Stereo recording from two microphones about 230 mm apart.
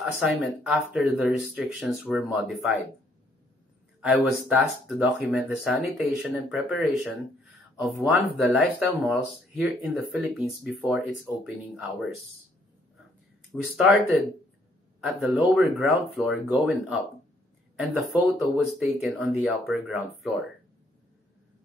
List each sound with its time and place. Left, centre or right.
0.2 s speech: centre
4.0 s speech: centre
13.7 s speech: centre